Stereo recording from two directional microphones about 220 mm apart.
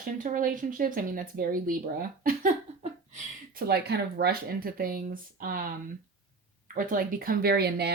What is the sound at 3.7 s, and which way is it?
Speech, 45° right (ahead or behind).